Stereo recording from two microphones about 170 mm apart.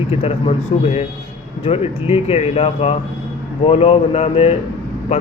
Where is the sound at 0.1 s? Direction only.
35° left (ahead or behind).